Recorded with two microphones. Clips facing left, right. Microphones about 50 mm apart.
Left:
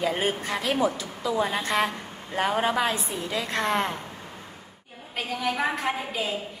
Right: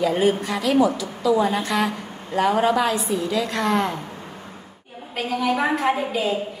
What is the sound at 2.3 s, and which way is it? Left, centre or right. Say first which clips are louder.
A woman's voice: right 5 dB; left.